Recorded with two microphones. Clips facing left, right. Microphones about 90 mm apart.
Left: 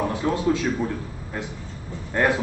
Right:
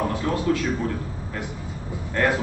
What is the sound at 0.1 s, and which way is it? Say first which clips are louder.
Speech: left 1 dB; 20° left (ahead or behind).